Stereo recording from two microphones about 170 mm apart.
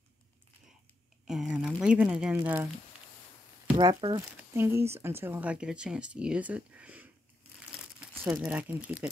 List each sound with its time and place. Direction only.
1.2 s speech: 5° right (ahead or behind)
4.0 s speech: 30° right (ahead or behind)
4.6 s speech: 15° right (ahead or behind)
7.7 s crumpling: 5° right (ahead or behind)
8.4 s speech: 10° right (ahead or behind)